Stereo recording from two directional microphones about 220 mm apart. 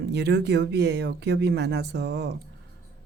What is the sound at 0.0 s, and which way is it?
Speech, 50° right (ahead or behind).